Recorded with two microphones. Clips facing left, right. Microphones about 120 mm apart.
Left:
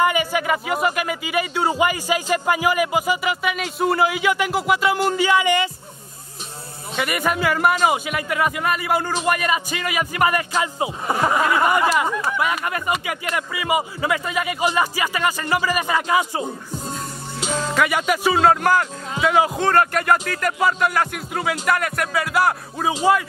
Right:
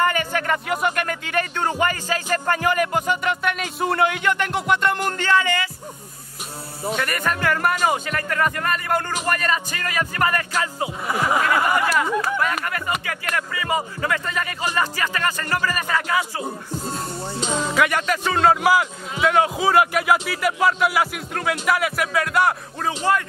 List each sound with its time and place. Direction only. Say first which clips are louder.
0.0 s speech: left 2 dB; 10° left (ahead or behind)
7.0 s speech: left 5 dB; 10° left (ahead or behind)
17.7 s speech: left 1 dB; 5° left (ahead or behind)